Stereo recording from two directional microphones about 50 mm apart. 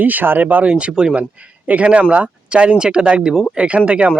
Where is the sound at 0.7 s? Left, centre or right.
Right.